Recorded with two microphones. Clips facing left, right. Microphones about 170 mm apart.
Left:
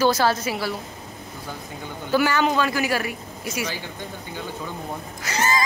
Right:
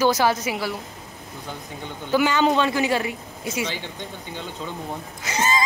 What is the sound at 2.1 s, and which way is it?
Speech, 20° right (ahead or behind).